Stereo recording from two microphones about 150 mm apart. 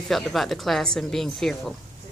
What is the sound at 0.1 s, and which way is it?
Speech, centre (ahead or behind).